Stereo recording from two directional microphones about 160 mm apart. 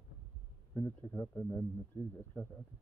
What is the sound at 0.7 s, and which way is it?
Speech, 20° left (ahead or behind).